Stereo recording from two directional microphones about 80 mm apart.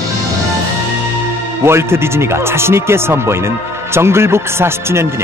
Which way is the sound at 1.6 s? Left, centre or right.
Right.